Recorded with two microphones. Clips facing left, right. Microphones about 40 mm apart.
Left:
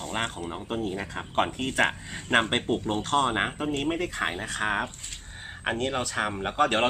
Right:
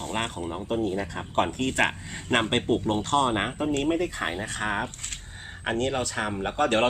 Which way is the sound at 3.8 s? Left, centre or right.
Left.